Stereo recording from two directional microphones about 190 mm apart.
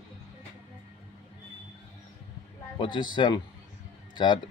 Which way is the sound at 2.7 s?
25° left (ahead or behind).